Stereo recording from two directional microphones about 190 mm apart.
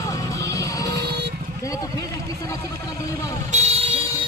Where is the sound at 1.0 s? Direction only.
60° right (ahead or behind).